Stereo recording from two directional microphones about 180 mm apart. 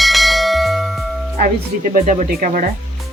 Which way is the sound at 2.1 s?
50° right (ahead or behind).